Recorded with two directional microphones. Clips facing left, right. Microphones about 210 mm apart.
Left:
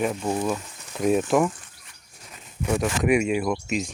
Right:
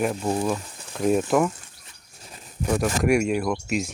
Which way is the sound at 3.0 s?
Centre (ahead or behind).